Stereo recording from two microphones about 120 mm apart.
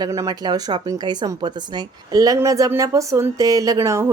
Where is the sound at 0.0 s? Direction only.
30° right (ahead or behind).